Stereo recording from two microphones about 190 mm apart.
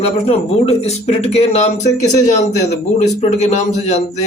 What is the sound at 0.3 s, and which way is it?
A man's voice, 35° left (ahead or behind).